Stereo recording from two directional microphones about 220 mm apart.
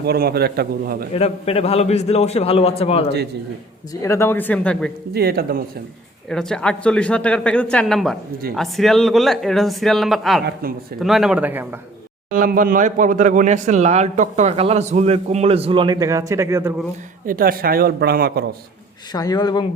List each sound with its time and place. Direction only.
0.0 s speech: 45° right (ahead or behind)
1.1 s a man's voice: 25° left (ahead or behind)
4.0 s speech: 10° left (ahead or behind)
5.1 s speech: 45° right (ahead or behind)
6.3 s speech: 5° left (ahead or behind)
10.4 s speech: 40° right (ahead or behind)
11.0 s speech: centre (ahead or behind)
12.3 s speech: 40° right (ahead or behind); by 16.7 s 10° right (ahead or behind)
17.2 s speech: 40° right (ahead or behind)
19.1 s speech: 15° left (ahead or behind)